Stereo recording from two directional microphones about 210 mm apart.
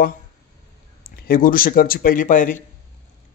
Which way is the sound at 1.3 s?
45° left (ahead or behind).